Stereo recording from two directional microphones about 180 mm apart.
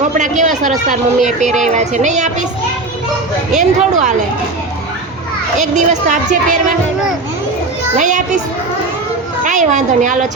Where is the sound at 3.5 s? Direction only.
40° right (ahead or behind).